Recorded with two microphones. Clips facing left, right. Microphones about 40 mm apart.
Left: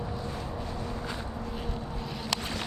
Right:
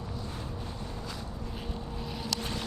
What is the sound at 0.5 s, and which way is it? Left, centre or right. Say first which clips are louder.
Vehicle: left 4 dB; left.